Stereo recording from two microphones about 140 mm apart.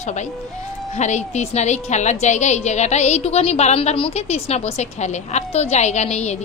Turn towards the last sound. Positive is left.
turn(degrees=55)  # may be behind; listen again after turning